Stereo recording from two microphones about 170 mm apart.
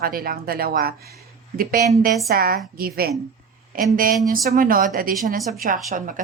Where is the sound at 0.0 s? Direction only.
60° right (ahead or behind).